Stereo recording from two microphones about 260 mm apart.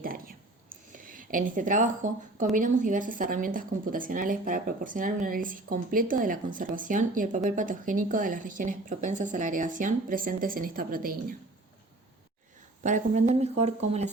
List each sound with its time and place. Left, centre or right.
0.0 s a sound: right
2.6 s speech: right
12.8 s speech: right